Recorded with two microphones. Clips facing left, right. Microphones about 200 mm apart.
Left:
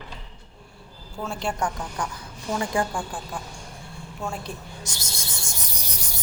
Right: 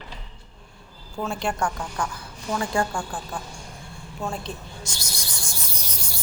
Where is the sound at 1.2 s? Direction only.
5° left (ahead or behind).